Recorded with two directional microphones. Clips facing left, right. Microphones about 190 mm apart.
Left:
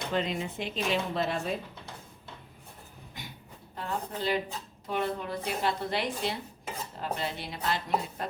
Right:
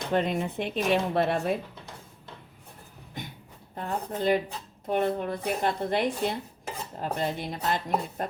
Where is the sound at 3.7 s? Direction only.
50° right (ahead or behind).